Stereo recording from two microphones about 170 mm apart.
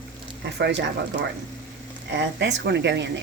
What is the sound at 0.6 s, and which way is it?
Speech, 85° right.